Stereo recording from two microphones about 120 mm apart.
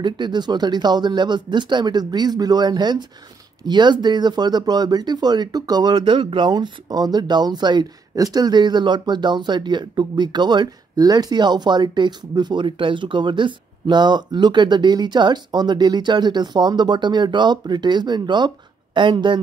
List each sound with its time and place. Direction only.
0.0 s speech: 40° right (ahead or behind)